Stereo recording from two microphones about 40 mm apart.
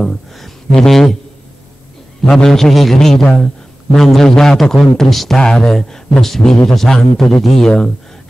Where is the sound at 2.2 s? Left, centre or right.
Centre.